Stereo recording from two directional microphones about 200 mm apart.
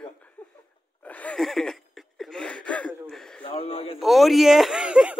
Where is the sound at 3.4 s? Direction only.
25° left (ahead or behind).